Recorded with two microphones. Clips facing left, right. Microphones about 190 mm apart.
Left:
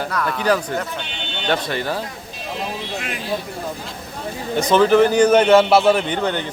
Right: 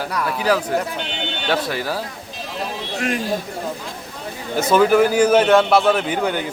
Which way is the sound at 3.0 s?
45° right (ahead or behind).